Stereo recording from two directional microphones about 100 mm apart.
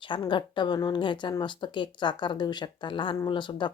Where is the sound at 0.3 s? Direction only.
50° left (ahead or behind).